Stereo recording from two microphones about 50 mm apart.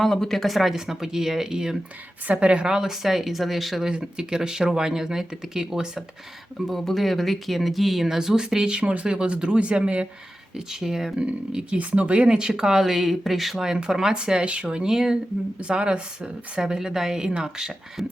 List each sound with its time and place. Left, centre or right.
0.0 s speech: centre
2.2 s speech: right; by 3.8 s centre
3.8 s speech: centre
6.7 s speech: centre; by 10.1 s right
10.7 s speech: centre
11.2 s speech: centre